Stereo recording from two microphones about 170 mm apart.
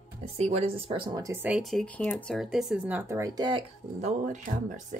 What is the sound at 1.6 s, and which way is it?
Speech, 5° left (ahead or behind).